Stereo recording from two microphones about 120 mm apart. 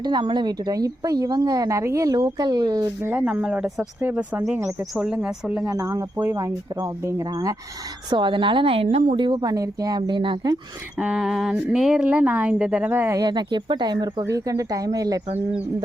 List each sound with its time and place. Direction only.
0.0 s a woman's voice: 35° right (ahead or behind)
3.0 s a woman's voice: 15° right (ahead or behind)
3.4 s a woman's voice: 5° right (ahead or behind)
5.6 s a woman's voice: 25° right (ahead or behind); by 9.1 s 60° right (ahead or behind)
9.1 s a woman's voice: 40° right (ahead or behind)
10.9 s a woman's voice: 5° right (ahead or behind)
13.1 s a woman's voice: 35° right (ahead or behind)